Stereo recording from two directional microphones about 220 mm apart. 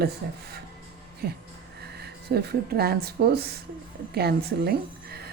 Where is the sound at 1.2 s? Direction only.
45° right (ahead or behind).